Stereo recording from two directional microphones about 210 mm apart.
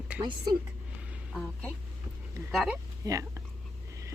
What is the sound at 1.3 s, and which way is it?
Speech, 5° left (ahead or behind).